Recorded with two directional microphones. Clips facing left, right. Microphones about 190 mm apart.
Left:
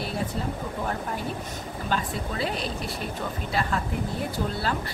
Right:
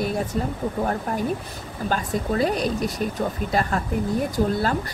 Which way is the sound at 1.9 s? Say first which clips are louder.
Right 5 dB; 45° right (ahead or behind).